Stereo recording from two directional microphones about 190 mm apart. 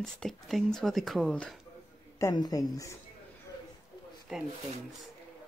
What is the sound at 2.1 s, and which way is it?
Speech, 20° left (ahead or behind).